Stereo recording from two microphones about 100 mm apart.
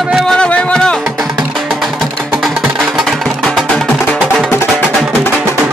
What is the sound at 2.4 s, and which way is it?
Music, centre (ahead or behind).